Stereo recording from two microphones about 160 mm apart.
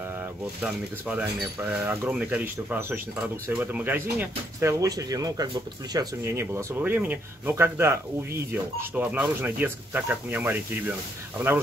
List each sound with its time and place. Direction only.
0.6 s speech: 5° right (ahead or behind)